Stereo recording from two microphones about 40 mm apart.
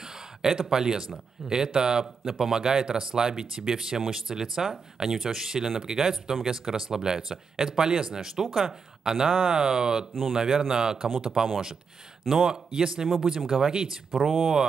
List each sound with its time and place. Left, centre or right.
0.4 s speech: centre
9.0 s speech: centre
12.4 s speech: centre
14.1 s speech: centre